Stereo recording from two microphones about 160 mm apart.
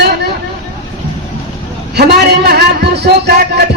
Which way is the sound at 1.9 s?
90° right.